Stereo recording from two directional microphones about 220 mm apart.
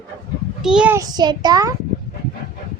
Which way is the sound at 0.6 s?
5° right (ahead or behind).